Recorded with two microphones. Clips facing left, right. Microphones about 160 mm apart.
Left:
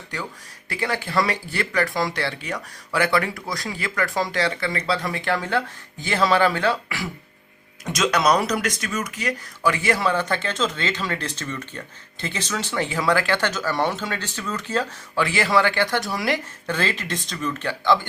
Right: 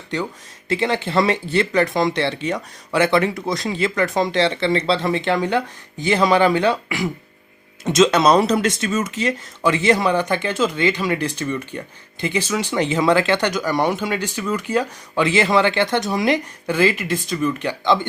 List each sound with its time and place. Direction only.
0.1 s speech: 20° right (ahead or behind)